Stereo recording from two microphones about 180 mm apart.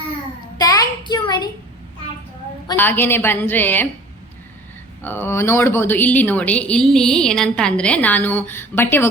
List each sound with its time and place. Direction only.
0.6 s child singing: 20° left (ahead or behind)
2.7 s speech: 10° left (ahead or behind)
5.0 s speech: 10° left (ahead or behind)